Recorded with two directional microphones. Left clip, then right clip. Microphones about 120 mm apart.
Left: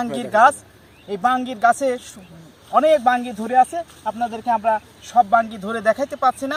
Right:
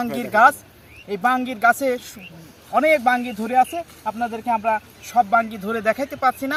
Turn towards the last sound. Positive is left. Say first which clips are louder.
# left 1 dB
turn(degrees=15)  # may be behind; listen again after turning